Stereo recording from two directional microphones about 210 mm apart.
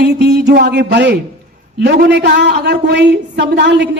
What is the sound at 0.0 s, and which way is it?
A woman's voice, 55° right (ahead or behind).